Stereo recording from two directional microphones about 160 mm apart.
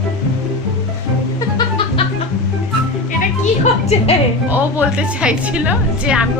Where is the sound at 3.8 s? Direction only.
40° left (ahead or behind).